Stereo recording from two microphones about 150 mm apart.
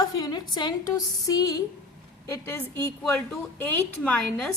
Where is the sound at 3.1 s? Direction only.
10° left (ahead or behind).